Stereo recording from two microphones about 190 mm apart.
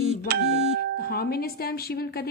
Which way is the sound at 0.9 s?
55° left (ahead or behind).